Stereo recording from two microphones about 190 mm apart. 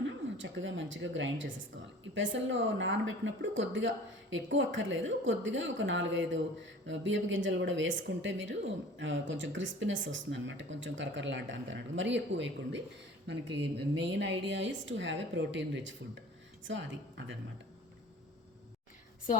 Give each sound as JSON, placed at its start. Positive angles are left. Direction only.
{"t": 0.0, "sound": "a woman's voice", "side_deg": -80}